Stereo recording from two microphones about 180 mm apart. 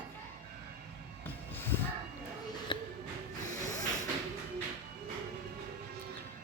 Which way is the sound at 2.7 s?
25° left (ahead or behind).